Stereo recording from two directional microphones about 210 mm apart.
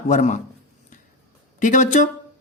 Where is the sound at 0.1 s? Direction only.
35° left (ahead or behind).